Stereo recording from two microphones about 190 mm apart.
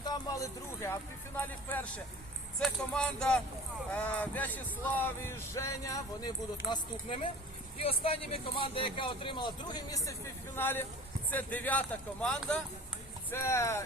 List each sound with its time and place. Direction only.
0.0 s music: 20° left (ahead or behind)
1.4 s speech: 10° left (ahead or behind)
6.7 s speech: 25° left (ahead or behind)